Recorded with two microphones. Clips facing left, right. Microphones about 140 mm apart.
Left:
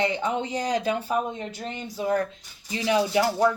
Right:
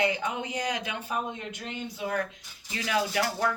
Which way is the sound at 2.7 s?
25° left (ahead or behind).